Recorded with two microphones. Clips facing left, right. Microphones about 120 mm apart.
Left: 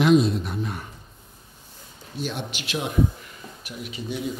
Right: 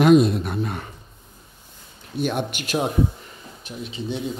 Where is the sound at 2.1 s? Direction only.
55° right (ahead or behind).